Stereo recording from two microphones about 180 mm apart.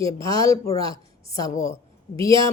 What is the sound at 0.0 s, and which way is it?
Speech, 20° left (ahead or behind).